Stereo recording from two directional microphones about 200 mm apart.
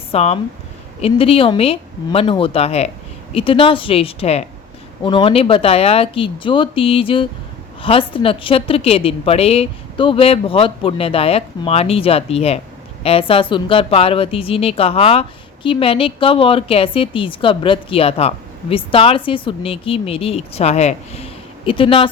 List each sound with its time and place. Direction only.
0.1 s speech: 30° left (ahead or behind)